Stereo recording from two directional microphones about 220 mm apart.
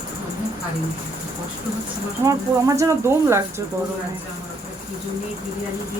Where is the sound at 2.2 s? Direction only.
15° right (ahead or behind).